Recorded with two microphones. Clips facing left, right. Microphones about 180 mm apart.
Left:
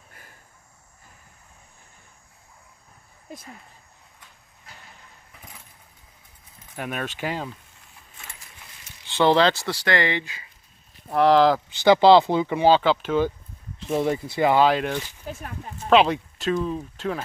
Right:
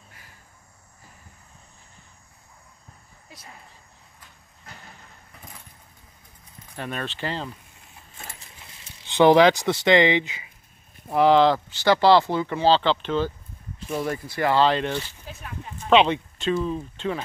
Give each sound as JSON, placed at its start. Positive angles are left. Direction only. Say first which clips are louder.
{"t": 3.3, "sound": "speech", "louder": "left 9 dB", "side_deg": 50}
{"t": 6.7, "sound": "speech", "louder": "left 1 dB", "side_deg": 10}
{"t": 8.2, "sound": "keys jangling", "louder": "right 3 dB", "side_deg": -30}
{"t": 9.0, "sound": "speech", "louder": "right 3 dB", "side_deg": -15}
{"t": 11.1, "sound": "speech", "louder": "even", "side_deg": 0}
{"t": 11.7, "sound": "speech", "louder": "left 5 dB", "side_deg": 15}
{"t": 13.8, "sound": "speech", "louder": "left 4 dB", "side_deg": 20}